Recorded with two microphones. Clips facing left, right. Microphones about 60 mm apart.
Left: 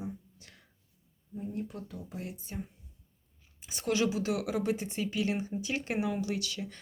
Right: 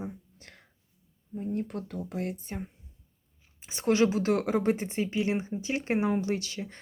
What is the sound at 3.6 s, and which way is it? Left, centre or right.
Speech, right.